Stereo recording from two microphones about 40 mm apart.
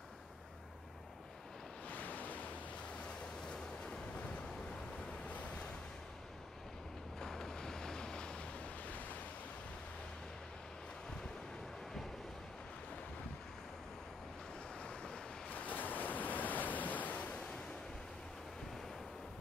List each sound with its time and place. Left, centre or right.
1.9 s waves: left
3.4 s waves: centre
7.2 s waves: centre
14.8 s waves: left
15.5 s waves: left